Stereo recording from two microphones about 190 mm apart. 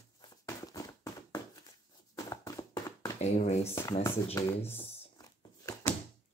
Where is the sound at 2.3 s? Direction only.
20° left (ahead or behind).